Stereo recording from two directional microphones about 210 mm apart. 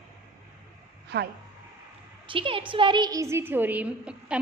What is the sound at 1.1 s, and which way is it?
Speech, 55° right (ahead or behind).